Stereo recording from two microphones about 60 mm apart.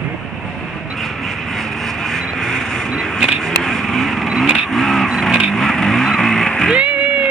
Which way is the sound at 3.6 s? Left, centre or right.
Centre.